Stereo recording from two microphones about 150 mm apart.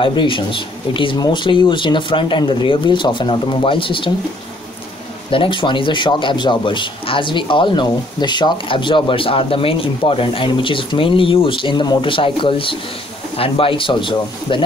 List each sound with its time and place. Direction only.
0.0 s speech: 35° left (ahead or behind)
5.3 s speech: 35° left (ahead or behind)